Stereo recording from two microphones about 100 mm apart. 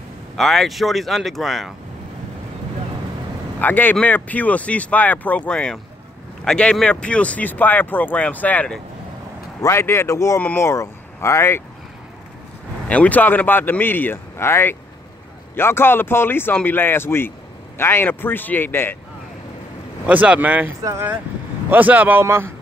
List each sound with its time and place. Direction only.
0.4 s speech: 5° left (ahead or behind)
3.5 s speech: 20° left (ahead or behind)
9.6 s speech: 25° left (ahead or behind)
12.8 s speech: 15° left (ahead or behind)
20.1 s speech: 15° right (ahead or behind)